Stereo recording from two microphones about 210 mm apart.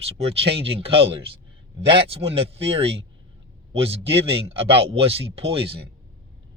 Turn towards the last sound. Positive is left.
turn(degrees=-25)  # may be behind; listen again after turning